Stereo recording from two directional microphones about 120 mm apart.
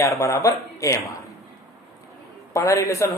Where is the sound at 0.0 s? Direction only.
25° left (ahead or behind).